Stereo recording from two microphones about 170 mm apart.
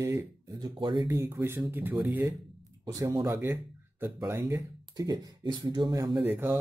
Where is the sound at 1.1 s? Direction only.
15° right (ahead or behind).